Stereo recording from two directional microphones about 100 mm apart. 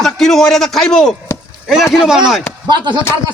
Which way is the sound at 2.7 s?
50° right (ahead or behind).